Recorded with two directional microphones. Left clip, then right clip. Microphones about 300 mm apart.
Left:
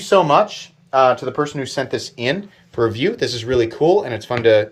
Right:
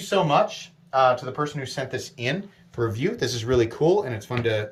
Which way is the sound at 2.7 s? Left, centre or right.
Centre.